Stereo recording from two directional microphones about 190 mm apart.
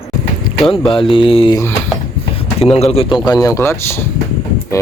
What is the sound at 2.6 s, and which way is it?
Speech, 30° left (ahead or behind).